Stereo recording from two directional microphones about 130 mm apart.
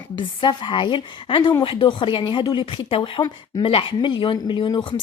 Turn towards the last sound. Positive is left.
turn(degrees=40)  # may be behind; listen again after turning